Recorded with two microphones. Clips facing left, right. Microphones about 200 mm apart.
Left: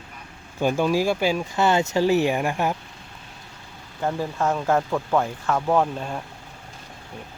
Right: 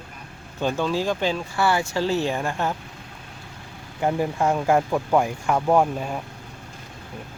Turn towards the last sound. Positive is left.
turn(degrees=-10)  # may be behind; listen again after turning